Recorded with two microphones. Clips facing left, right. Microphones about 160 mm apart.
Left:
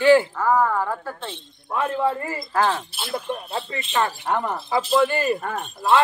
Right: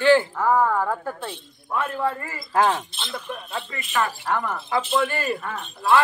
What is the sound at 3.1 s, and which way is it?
Speech, 35° left (ahead or behind).